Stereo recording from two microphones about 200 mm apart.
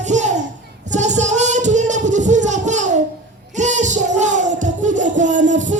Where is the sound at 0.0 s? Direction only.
35° right (ahead or behind).